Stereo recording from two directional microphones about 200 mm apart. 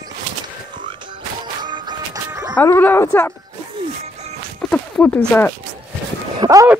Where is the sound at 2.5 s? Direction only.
10° left (ahead or behind).